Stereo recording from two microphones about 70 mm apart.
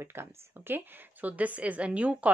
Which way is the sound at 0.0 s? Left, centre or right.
Right.